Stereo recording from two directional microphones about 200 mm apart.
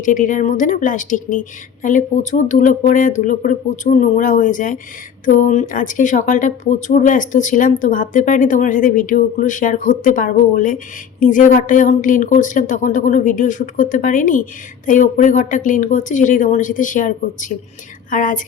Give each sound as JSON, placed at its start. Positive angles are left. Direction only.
{"t": 0.0, "sound": "a woman's voice", "side_deg": 40}